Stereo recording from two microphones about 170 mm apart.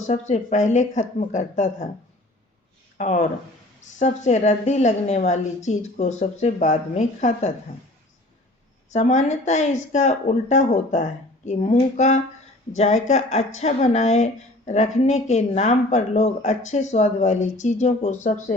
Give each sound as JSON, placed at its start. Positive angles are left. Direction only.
{"t": 0.1, "sound": "speech", "side_deg": 40}
{"t": 3.0, "sound": "speech", "side_deg": 45}
{"t": 8.9, "sound": "speech", "side_deg": 45}